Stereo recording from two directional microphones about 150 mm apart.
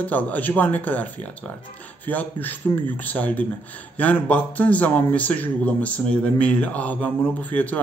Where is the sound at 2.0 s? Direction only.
10° left (ahead or behind).